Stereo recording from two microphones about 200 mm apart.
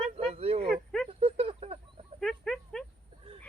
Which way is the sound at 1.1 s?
30° right (ahead or behind).